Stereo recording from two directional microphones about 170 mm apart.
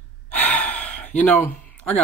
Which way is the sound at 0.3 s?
5° left (ahead or behind).